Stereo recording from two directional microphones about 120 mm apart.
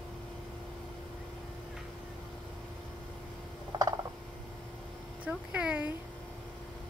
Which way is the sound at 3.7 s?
30° right (ahead or behind).